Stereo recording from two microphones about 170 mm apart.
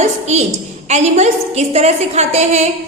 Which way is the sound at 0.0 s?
40° right (ahead or behind).